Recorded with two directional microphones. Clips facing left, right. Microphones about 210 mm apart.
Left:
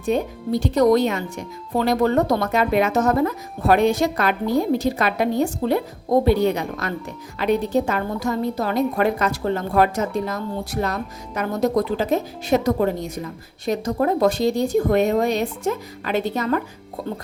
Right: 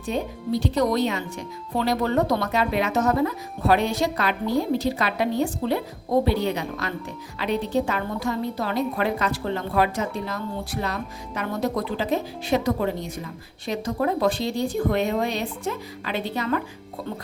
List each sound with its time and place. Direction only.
0.0 s a woman's voice: 50° left (ahead or behind)